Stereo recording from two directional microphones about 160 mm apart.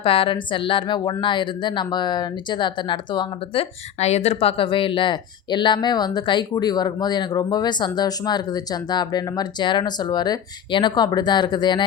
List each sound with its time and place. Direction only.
0.0 s speech: 35° left (ahead or behind)